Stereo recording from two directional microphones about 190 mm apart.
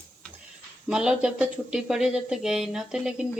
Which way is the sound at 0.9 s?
5° right (ahead or behind).